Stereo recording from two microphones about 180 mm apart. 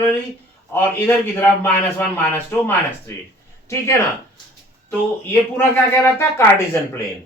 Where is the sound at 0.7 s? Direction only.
10° left (ahead or behind).